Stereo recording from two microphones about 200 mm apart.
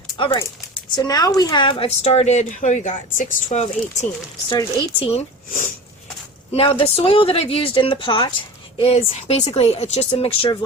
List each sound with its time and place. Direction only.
0.2 s a woman's voice: 25° left (ahead or behind)
4.4 s speech: 25° left (ahead or behind)
5.5 s a woman's voice: 40° left (ahead or behind)
6.5 s speech: 25° left (ahead or behind)